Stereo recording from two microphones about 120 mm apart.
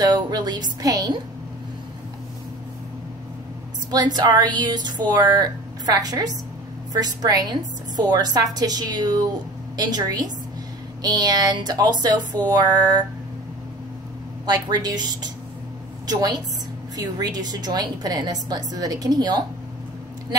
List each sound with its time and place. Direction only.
0.0 s speech: 35° right (ahead or behind)
3.9 s speech: 35° right (ahead or behind)
14.4 s speech: 35° right (ahead or behind)